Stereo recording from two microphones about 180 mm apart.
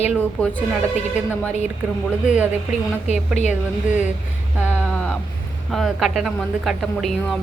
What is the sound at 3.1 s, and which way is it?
Speech, 40° left (ahead or behind).